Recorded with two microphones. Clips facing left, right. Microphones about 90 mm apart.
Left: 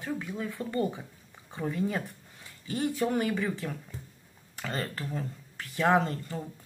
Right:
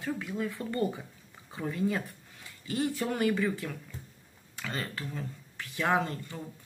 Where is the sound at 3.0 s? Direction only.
25° left (ahead or behind).